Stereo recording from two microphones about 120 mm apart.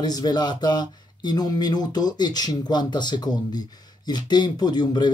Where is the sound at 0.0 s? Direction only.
35° left (ahead or behind).